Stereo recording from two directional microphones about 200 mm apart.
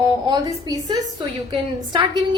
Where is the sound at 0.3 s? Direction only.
20° right (ahead or behind).